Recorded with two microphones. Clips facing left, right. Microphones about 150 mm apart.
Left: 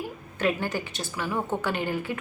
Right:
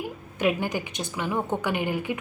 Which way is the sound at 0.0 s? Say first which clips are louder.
Right 2 dB; 15° right (ahead or behind).